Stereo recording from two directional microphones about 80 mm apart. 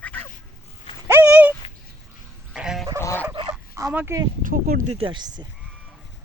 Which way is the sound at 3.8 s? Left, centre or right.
Right.